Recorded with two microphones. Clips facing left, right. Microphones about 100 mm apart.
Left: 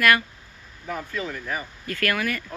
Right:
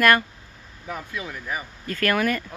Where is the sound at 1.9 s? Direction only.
25° right (ahead or behind).